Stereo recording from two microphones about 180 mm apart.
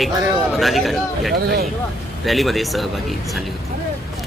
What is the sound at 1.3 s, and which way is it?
Speech, 60° right (ahead or behind).